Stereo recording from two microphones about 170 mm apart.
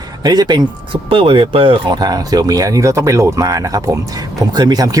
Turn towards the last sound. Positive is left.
turn(degrees=-20)  # may be behind; listen again after turning